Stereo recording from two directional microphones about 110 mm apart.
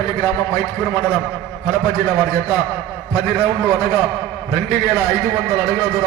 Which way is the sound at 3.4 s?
25° right (ahead or behind).